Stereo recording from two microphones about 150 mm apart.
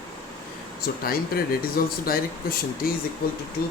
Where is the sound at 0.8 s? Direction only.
85° left.